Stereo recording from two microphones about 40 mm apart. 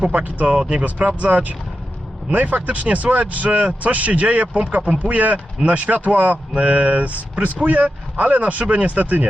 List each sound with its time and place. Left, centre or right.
0.0 s speech: right
6.5 s speech: right